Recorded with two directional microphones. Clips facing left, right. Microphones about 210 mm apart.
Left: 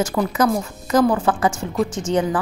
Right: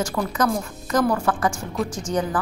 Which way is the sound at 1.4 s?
5° left (ahead or behind).